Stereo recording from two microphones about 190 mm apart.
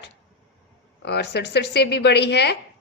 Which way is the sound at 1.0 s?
60° left (ahead or behind).